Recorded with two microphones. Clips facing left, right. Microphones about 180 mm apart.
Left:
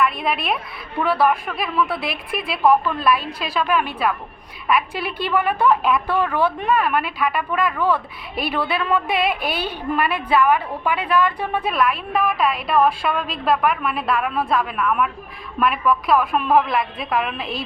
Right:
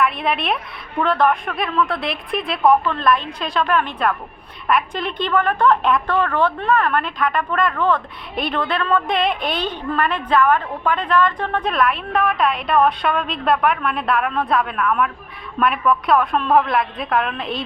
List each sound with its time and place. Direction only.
0.0 s a woman's voice: centre (ahead or behind)